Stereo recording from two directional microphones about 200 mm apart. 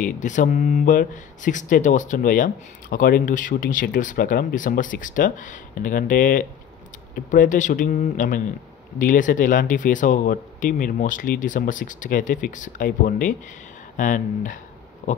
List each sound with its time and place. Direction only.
0.0 s speech: 40° left (ahead or behind)